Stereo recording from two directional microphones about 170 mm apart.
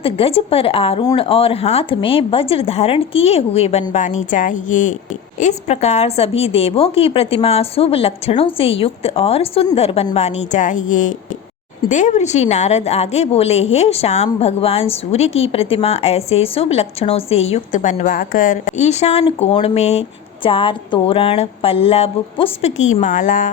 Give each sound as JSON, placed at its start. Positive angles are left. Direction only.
{"t": 0.0, "sound": "a woman's voice", "side_deg": 35}